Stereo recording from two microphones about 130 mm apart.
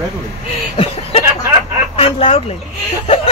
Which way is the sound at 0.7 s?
50° left (ahead or behind).